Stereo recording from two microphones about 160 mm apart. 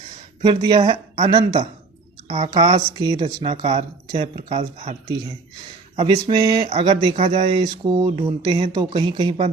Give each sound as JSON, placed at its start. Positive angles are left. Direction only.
{"t": 0.4, "sound": "speech", "side_deg": -35}
{"t": 2.2, "sound": "a woman's voice", "side_deg": -40}
{"t": 2.6, "sound": "speech", "side_deg": -25}
{"t": 6.0, "sound": "speech", "side_deg": -30}